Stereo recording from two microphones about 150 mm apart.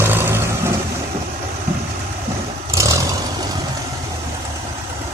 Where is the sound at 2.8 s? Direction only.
20° right (ahead or behind).